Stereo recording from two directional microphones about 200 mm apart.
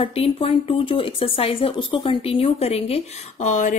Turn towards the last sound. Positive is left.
turn(degrees=40)  # may be behind; listen again after turning